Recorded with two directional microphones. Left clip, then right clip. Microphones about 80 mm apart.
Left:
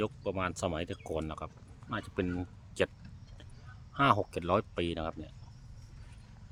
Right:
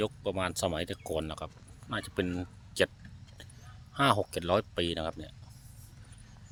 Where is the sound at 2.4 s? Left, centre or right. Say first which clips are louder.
Right 3 dB; centre.